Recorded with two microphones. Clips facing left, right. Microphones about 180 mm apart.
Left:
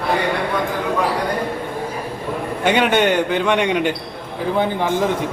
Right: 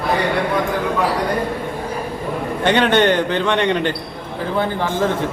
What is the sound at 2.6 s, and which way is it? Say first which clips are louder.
Speech: right 1 dB; 10° left (ahead or behind).